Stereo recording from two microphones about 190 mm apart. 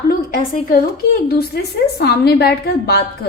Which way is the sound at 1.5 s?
55° left (ahead or behind).